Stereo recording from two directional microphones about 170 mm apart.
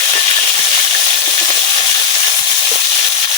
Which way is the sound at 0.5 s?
30° left (ahead or behind).